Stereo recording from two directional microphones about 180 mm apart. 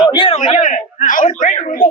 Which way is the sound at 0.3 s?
45° left (ahead or behind).